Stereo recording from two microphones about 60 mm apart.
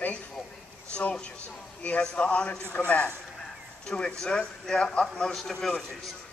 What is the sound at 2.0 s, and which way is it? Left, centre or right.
Speech, centre.